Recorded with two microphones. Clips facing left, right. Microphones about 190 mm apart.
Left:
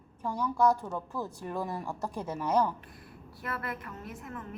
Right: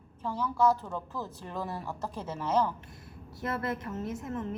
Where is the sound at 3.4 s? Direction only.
25° right (ahead or behind).